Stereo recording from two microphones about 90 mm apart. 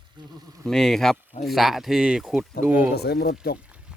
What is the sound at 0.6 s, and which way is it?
Speech, 5° left (ahead or behind).